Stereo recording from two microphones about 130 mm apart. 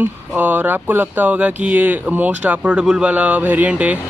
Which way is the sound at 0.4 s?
15° right (ahead or behind).